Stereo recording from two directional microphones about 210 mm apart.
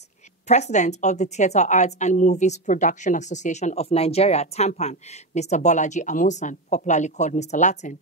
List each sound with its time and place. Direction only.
0.5 s a woman's voice: 35° left (ahead or behind)